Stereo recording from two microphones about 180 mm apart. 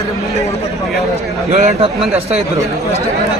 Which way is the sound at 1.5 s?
35° right (ahead or behind).